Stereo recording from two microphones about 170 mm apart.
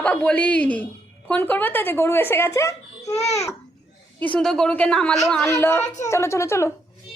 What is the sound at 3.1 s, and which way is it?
Speech, 40° left (ahead or behind).